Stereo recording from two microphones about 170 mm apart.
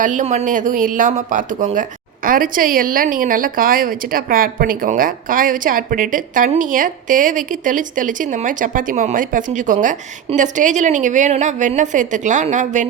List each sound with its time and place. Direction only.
0.0 s speech: 45° right (ahead or behind)